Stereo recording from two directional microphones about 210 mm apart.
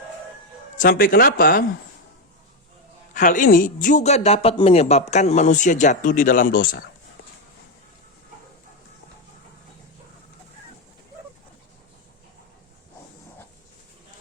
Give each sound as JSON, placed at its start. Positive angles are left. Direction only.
{"t": 0.8, "sound": "speech", "side_deg": 40}
{"t": 3.2, "sound": "speech", "side_deg": 40}